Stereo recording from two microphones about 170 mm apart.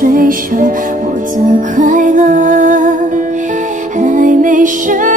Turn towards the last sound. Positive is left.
turn(degrees=-50)  # may be behind; listen again after turning